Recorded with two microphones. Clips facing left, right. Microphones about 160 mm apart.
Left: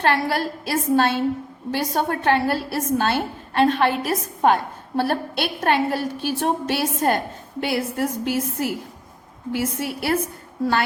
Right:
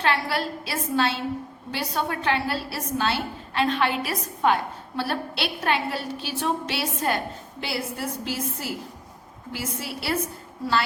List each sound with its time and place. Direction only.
0.0 s a woman's voice: 50° left (ahead or behind)